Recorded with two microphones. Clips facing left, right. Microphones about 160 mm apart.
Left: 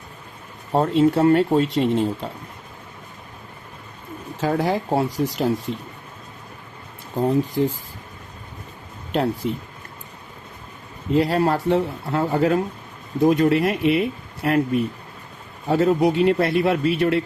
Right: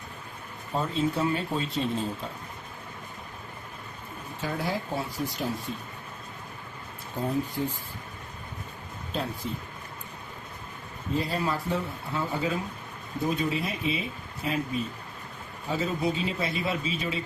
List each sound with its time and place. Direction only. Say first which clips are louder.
0.7 s speech: left 10 dB; 75° left (ahead or behind)
4.4 s speech: left 9 dB; 75° left (ahead or behind)
7.2 s speech: left 9 dB; 90° left
9.1 s speech: left 10 dB; 80° left
11.1 s speech: left 10 dB; 85° left